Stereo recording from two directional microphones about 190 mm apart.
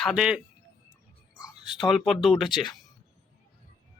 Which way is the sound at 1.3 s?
20° left (ahead or behind).